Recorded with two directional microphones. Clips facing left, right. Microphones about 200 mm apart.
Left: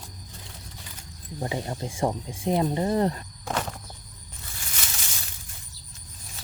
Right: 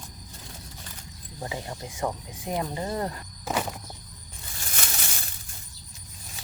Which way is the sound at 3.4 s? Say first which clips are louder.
Right 1 dB; 10° right (ahead or behind).